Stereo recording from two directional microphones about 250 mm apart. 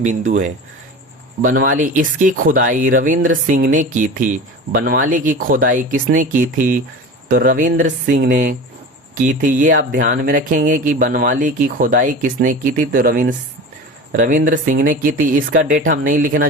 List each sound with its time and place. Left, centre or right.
0.3 s speech: right